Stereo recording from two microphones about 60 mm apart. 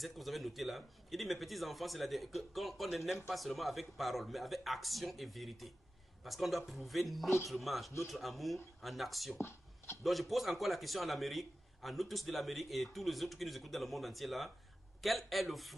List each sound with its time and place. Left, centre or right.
0.0 s a man's voice: centre
9.4 s a sound: left
10.0 s a man's voice: centre